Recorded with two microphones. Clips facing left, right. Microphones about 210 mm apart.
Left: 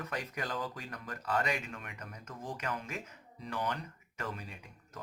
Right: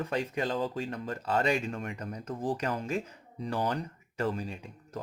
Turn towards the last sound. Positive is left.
turn(degrees=-30)  # may be behind; listen again after turning